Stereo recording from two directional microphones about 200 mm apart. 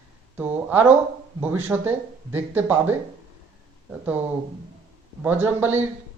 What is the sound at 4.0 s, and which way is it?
Speech, 10° right (ahead or behind).